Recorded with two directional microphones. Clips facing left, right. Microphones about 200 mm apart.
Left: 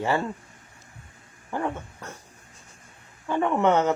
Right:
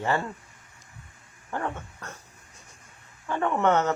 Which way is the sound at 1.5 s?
10° left (ahead or behind).